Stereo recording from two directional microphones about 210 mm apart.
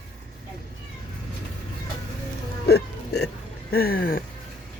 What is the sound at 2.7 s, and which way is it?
Music, 50° left (ahead or behind).